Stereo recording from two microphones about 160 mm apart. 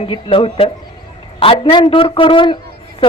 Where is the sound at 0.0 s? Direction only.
35° left (ahead or behind).